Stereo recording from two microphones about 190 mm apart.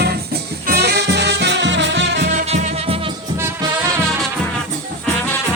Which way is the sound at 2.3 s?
40° right (ahead or behind).